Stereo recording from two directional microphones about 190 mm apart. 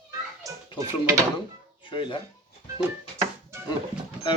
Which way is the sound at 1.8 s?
25° left (ahead or behind).